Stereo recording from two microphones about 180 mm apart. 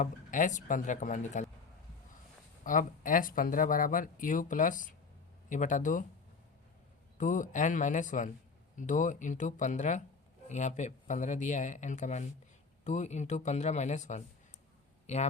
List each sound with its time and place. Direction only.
0.0 s speech: 45° left (ahead or behind)
2.6 s speech: 45° left (ahead or behind)
7.2 s speech: 45° left (ahead or behind)